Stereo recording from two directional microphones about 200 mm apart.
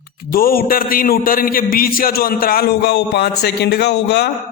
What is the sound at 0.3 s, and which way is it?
A man's voice, 45° left (ahead or behind).